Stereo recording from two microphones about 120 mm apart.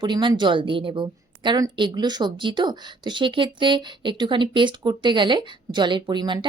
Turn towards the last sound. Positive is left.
turn(degrees=-40)  # may be behind; listen again after turning